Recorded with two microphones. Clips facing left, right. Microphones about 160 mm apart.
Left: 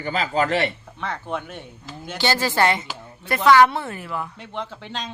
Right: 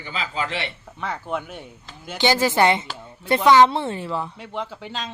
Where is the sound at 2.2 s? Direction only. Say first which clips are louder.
Right 2 dB; 20° right (ahead or behind).